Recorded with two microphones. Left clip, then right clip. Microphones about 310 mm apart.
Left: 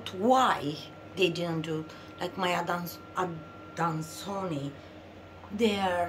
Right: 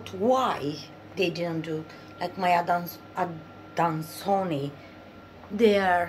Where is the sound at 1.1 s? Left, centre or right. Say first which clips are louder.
Right 1 dB; centre.